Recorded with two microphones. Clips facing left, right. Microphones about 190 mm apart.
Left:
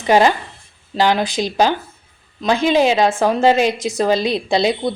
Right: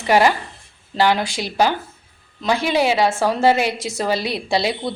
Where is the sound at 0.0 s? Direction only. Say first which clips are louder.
Left 2 dB; 20° left (ahead or behind).